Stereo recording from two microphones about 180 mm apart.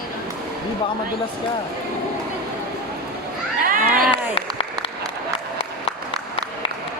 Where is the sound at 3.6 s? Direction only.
50° right (ahead or behind).